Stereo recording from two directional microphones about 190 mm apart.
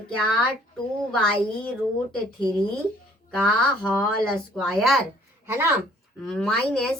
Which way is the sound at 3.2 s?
5° left (ahead or behind).